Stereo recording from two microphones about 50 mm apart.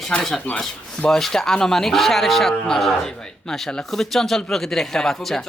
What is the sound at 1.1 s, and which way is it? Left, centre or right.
Speech, centre.